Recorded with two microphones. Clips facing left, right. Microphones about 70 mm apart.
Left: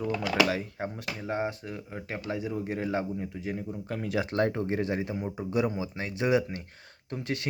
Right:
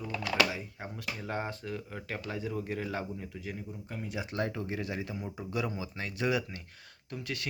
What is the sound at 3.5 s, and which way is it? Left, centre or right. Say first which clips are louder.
Speech: left 7 dB; left.